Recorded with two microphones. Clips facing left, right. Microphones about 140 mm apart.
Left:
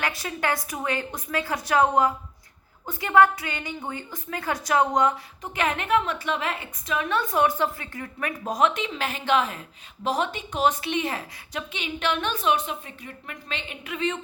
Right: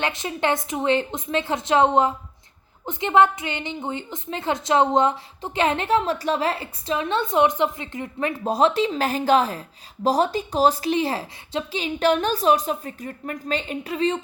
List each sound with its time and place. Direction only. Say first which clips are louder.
0.0 s a woman's voice: right 4 dB; 20° right (ahead or behind)